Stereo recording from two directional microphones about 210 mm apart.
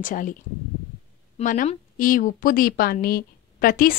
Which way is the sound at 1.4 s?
40° left (ahead or behind).